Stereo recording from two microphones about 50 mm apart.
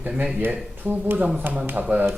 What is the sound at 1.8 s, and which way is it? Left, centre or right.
Speech, right.